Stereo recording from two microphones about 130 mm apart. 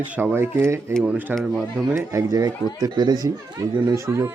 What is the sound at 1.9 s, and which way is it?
Speech, 25° right (ahead or behind).